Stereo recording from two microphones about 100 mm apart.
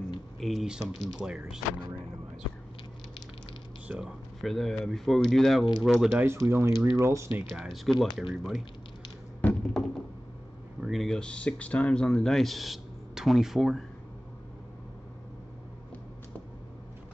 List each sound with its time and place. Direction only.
0.4 s speech: centre (ahead or behind)
3.8 s speech: 15° right (ahead or behind)
4.4 s speech: centre (ahead or behind)
6.2 s speech: 25° right (ahead or behind)
7.4 s speech: centre (ahead or behind)
9.4 s a sound: 5° left (ahead or behind)
10.8 s speech: centre (ahead or behind)